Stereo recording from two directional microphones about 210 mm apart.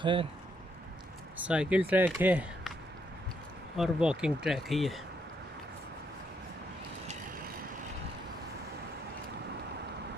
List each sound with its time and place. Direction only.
0.0 s speech: 25° right (ahead or behind)
1.4 s speech: 5° right (ahead or behind)
3.7 s speech: 5° right (ahead or behind)